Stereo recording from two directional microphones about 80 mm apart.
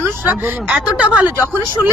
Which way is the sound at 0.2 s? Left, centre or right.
Right.